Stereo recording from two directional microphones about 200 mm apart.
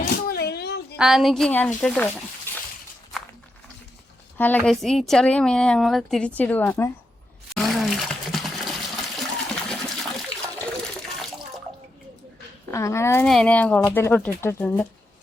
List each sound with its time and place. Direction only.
0.0 s a sound: 50° left (ahead or behind)
0.9 s speech: centre (ahead or behind)
2.5 s a sound: 10° left (ahead or behind)
4.4 s speech: 10° left (ahead or behind)
7.5 s water: centre (ahead or behind)
10.8 s toilet flush: centre (ahead or behind)
12.7 s speech: 15° left (ahead or behind)